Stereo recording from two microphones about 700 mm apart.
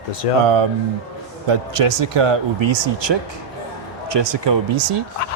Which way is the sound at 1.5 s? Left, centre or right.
Right.